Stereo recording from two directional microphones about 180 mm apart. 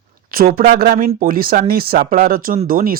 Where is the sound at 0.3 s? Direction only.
55° right (ahead or behind).